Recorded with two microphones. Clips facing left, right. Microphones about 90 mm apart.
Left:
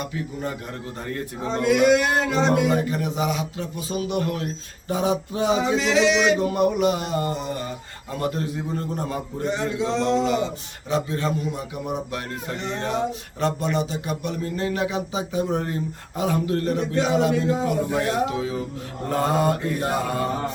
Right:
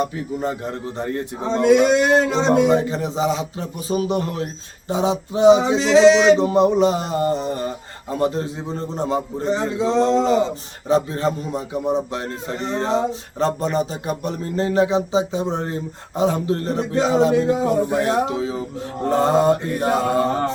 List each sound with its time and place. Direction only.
0.9 s speech: 30° right (ahead or behind)